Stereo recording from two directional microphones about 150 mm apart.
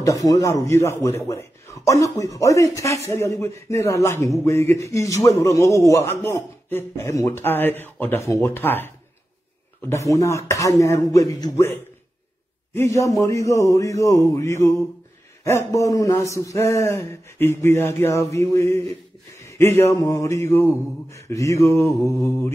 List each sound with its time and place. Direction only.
0.0 s a man's voice: 20° left (ahead or behind)
19.7 s a man's voice: 20° left (ahead or behind)